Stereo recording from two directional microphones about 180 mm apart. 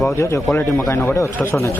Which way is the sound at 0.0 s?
15° left (ahead or behind).